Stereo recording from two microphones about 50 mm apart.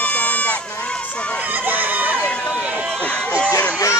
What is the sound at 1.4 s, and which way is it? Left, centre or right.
Speech, right.